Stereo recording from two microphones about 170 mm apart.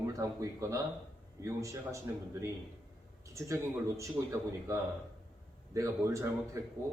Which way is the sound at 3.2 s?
20° right (ahead or behind).